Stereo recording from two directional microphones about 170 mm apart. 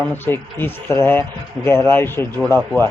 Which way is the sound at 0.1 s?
10° left (ahead or behind).